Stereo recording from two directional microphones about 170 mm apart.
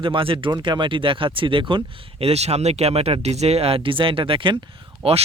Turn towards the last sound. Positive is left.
turn(degrees=-35)  # may be behind; listen again after turning